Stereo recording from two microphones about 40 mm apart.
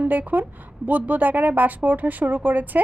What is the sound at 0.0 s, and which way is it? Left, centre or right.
A woman's voice, right.